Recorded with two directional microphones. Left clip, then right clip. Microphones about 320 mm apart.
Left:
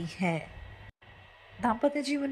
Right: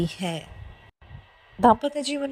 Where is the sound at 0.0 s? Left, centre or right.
Centre.